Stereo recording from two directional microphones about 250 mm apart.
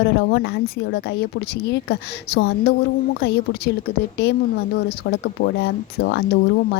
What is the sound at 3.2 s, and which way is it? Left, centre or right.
Speech, left.